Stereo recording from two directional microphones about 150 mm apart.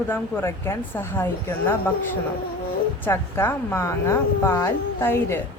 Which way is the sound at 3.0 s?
15° left (ahead or behind).